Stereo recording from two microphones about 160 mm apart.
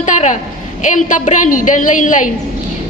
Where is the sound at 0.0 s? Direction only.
50° left (ahead or behind).